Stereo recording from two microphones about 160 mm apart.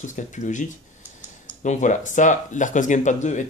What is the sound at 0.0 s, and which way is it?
Speech, 50° left (ahead or behind).